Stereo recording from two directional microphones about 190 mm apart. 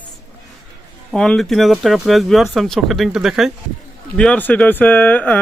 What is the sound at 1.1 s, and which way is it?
Speech, 5° left (ahead or behind).